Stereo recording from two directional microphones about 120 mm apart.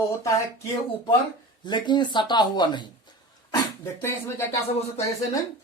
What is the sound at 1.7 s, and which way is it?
Speech, 40° left (ahead or behind).